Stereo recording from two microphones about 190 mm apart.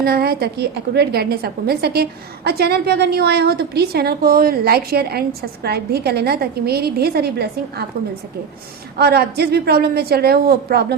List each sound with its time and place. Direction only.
0.0 s a woman's voice: 55° right (ahead or behind)
9.0 s a woman's voice: 60° right (ahead or behind)